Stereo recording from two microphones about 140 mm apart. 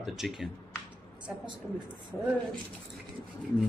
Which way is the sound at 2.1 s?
15° left (ahead or behind).